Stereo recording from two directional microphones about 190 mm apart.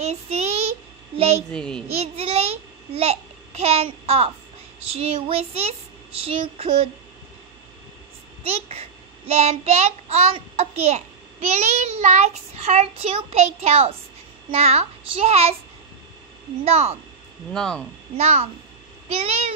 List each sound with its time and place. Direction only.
0.0 s child singing: 35° right (ahead or behind)
1.1 s a woman's voice: 30° right (ahead or behind)
1.5 s speech: 5° left (ahead or behind)
2.0 s babbling: 35° right (ahead or behind)
4.9 s a child's voice: 30° right (ahead or behind)
8.5 s a child's voice: 30° right (ahead or behind)
16.6 s a child's voice: 30° right (ahead or behind)
17.5 s speech: 5° left (ahead or behind)
18.1 s a child's voice: 35° right (ahead or behind)